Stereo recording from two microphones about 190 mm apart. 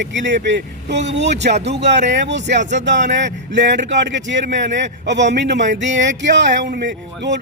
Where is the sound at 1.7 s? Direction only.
65° right (ahead or behind).